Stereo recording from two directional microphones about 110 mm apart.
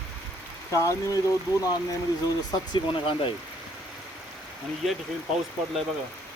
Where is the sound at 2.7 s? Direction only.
50° left (ahead or behind).